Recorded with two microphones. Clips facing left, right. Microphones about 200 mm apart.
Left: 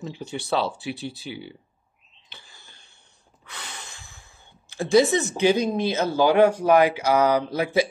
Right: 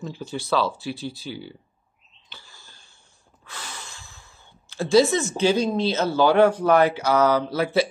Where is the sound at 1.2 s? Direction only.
15° left (ahead or behind).